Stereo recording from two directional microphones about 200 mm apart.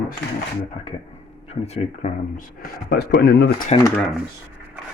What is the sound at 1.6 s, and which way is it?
Speech, 35° left (ahead or behind).